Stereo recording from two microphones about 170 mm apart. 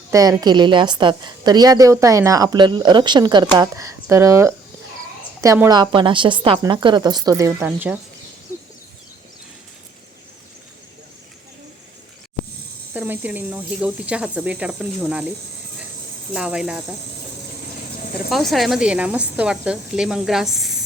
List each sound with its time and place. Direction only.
0.1 s a woman's voice: 20° right (ahead or behind)
12.9 s speech: 10° right (ahead or behind)
16.3 s speech: 5° right (ahead or behind)
18.3 s speech: centre (ahead or behind)